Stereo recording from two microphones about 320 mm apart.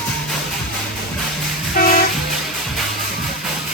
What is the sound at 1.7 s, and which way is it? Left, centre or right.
Train, left.